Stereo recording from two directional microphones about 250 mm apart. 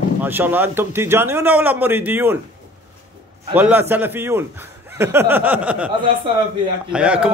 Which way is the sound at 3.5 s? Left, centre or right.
Centre.